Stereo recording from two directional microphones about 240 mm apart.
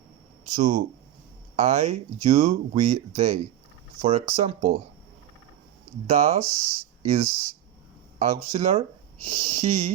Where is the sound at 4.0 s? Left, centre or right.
Right.